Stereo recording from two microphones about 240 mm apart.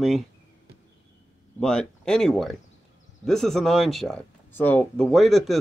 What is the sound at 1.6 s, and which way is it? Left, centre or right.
Speech, centre.